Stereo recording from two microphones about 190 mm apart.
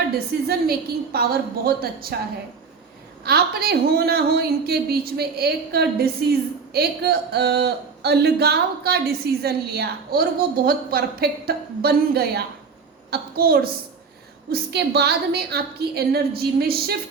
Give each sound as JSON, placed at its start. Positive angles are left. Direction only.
{"t": 0.4, "sound": "a woman's voice", "side_deg": -55}
{"t": 3.2, "sound": "a woman's voice", "side_deg": -55}